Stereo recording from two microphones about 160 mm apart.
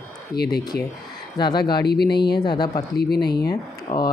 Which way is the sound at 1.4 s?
25° left (ahead or behind).